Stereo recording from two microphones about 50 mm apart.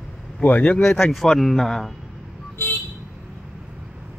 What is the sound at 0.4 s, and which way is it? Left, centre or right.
Speech, left.